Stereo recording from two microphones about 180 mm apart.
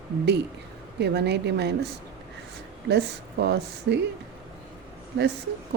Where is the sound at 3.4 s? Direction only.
70° right (ahead or behind).